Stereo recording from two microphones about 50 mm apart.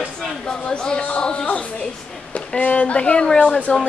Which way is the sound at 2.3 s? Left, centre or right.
Left.